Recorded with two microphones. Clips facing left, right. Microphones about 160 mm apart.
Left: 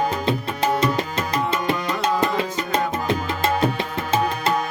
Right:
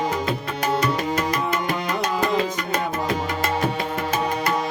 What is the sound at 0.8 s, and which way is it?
Music, 25° left (ahead or behind).